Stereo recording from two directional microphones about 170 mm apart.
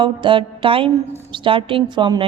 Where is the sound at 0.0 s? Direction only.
30° right (ahead or behind).